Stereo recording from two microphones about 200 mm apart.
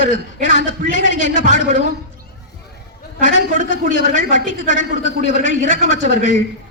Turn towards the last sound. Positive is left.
turn(degrees=65)  # may be behind; listen again after turning